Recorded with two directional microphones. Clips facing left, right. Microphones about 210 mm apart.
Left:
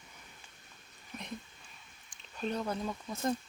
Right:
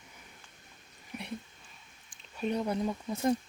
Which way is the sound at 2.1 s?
10° right (ahead or behind).